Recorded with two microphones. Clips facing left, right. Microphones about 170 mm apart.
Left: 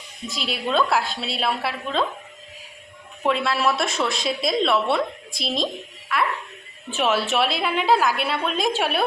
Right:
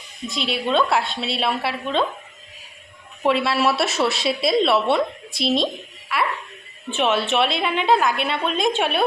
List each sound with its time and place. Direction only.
0.3 s a woman's voice: centre (ahead or behind)
3.2 s a woman's voice: 5° right (ahead or behind)